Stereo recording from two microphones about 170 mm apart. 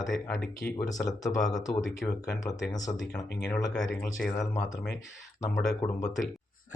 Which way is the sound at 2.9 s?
20° left (ahead or behind).